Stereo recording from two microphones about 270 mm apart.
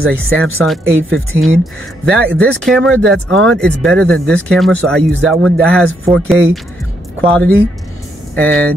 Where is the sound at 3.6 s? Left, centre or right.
Centre.